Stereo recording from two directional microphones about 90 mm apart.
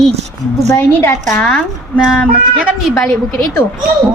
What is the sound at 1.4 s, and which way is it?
Speech, 10° left (ahead or behind).